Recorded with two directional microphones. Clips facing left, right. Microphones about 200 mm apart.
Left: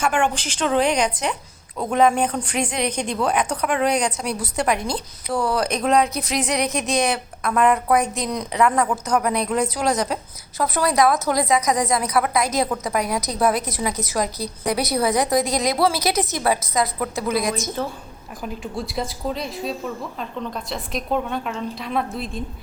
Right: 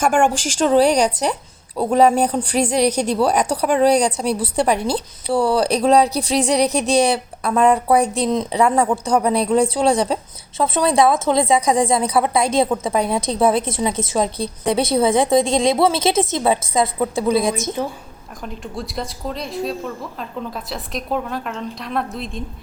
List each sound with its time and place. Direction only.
0.0 s a woman's voice: 45° right (ahead or behind); by 17.5 s 30° right (ahead or behind)
17.8 s a woman's voice: 15° right (ahead or behind)
18.4 s a woman's voice: centre (ahead or behind)